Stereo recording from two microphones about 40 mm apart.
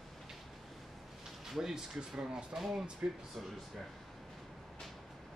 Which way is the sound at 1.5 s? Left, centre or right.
Centre.